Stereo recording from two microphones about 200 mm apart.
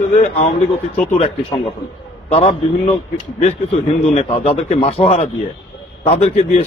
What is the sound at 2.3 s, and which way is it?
Speech, 30° left (ahead or behind).